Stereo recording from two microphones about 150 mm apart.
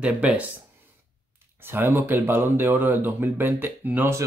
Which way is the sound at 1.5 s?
15° right (ahead or behind).